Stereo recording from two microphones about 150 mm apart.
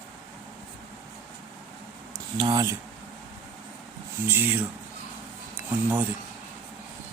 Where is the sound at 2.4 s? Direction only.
25° right (ahead or behind).